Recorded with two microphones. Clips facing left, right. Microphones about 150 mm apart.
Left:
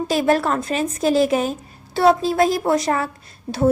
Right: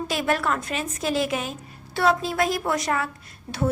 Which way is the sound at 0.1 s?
35° left (ahead or behind).